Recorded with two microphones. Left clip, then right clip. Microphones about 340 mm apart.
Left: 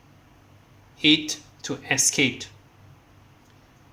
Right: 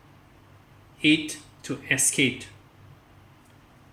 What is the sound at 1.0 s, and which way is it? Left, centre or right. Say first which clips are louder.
Speech: left 2 dB; centre.